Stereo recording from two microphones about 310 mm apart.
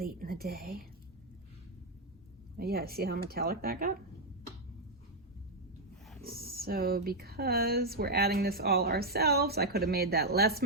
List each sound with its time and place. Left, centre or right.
0.0 s speech: right
2.6 s speech: right
6.2 s speech: right